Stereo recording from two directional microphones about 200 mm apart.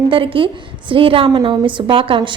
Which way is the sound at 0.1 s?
25° right (ahead or behind).